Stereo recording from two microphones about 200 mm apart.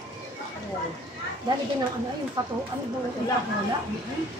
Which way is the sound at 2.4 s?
20° right (ahead or behind).